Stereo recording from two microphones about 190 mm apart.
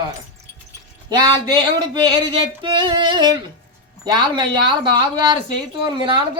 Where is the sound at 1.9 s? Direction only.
25° right (ahead or behind).